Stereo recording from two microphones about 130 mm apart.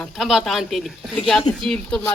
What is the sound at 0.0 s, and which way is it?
Speech, centre (ahead or behind).